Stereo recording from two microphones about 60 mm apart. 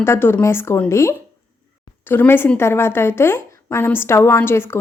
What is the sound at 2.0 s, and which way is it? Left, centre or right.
A woman's voice, left.